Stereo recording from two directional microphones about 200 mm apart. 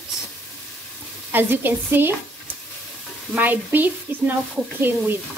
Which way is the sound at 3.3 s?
10° right (ahead or behind).